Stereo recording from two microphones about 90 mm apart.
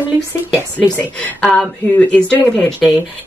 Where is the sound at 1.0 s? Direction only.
15° left (ahead or behind).